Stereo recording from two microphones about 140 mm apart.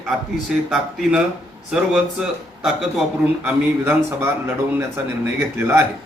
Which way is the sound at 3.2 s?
15° right (ahead or behind).